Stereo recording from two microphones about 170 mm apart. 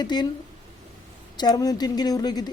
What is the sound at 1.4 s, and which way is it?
A woman's voice, 20° left (ahead or behind).